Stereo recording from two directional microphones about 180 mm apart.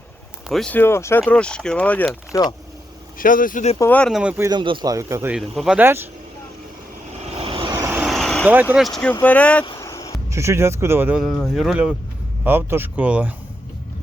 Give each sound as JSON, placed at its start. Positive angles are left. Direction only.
{"t": 0.4, "sound": "speech", "side_deg": 0}
{"t": 2.3, "sound": "speech", "side_deg": 20}
{"t": 3.2, "sound": "speech", "side_deg": 50}
{"t": 3.8, "sound": "speech", "side_deg": 10}
{"t": 4.2, "sound": "speech", "side_deg": -5}
{"t": 4.4, "sound": "speech", "side_deg": -25}
{"t": 5.3, "sound": "speech", "side_deg": 0}
{"t": 7.4, "sound": "vehicle", "side_deg": -30}
{"t": 7.8, "sound": "vehicle", "side_deg": -15}
{"t": 8.0, "sound": "vehicle", "side_deg": 0}
{"t": 8.4, "sound": "speech", "side_deg": -10}
{"t": 9.6, "sound": "vehicle", "side_deg": 20}
{"t": 10.2, "sound": "speech", "side_deg": -15}
{"t": 11.2, "sound": "speech", "side_deg": 0}